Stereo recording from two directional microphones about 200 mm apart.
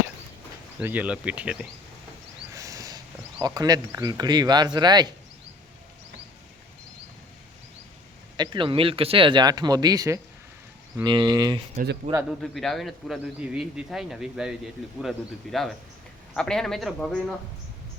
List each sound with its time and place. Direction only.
0.8 s speech: 10° right (ahead or behind)
2.5 s a sound: 15° right (ahead or behind)
3.4 s speech: 20° right (ahead or behind)
8.4 s speech: 25° right (ahead or behind)
12.3 s a man's voice: centre (ahead or behind)